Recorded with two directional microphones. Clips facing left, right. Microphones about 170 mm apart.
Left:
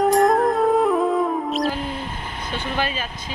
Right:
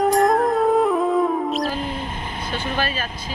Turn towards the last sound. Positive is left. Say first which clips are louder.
# even
turn(degrees=15)  # may be behind; listen again after turning